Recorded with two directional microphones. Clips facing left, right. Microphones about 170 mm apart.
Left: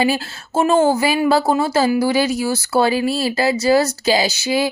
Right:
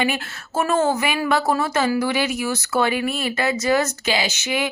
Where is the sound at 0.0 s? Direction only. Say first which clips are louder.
Left 5 dB; 30° left (ahead or behind).